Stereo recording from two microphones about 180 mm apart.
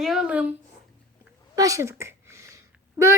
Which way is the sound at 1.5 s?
20° right (ahead or behind).